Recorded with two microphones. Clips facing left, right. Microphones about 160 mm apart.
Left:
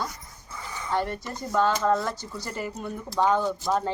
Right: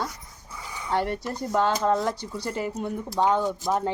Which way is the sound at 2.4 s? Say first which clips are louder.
Right 4 dB; 65° right (ahead or behind).